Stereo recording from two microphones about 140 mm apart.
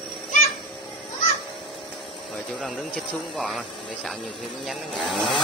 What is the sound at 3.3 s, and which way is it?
Speech, 5° left (ahead or behind).